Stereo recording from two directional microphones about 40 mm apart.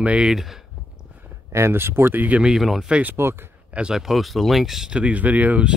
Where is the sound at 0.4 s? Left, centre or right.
Centre.